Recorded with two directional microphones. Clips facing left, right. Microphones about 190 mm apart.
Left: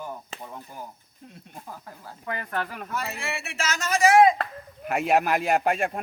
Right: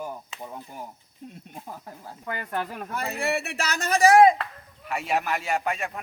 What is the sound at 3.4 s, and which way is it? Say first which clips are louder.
Speech: right 1 dB; 40° right (ahead or behind).